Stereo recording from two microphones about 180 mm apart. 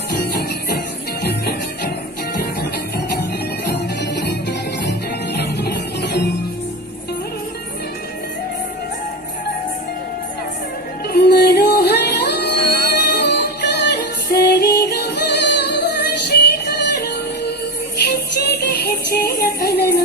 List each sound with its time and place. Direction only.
0.1 s music: 60° left (ahead or behind)
3.7 s music: 65° left (ahead or behind)
11.1 s music: 65° left (ahead or behind)